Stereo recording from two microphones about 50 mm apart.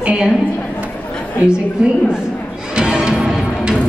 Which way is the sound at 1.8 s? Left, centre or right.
Centre.